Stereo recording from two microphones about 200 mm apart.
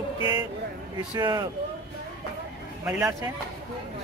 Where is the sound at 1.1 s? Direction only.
20° right (ahead or behind).